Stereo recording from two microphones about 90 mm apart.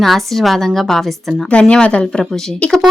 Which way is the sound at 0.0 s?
Centre (ahead or behind).